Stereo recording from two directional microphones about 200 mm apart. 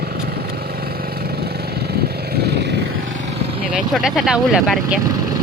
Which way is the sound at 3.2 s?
30° right (ahead or behind).